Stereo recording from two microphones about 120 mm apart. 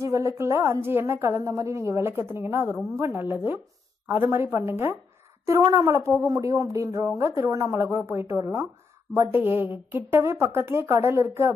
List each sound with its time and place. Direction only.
0.0 s speech: 25° right (ahead or behind)
3.2 s chopping: 20° right (ahead or behind)
4.1 s speech: 20° right (ahead or behind)